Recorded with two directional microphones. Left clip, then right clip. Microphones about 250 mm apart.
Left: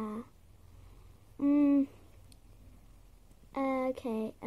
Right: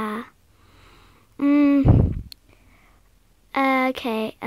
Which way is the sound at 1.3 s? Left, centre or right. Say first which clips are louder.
Right 9 dB; centre.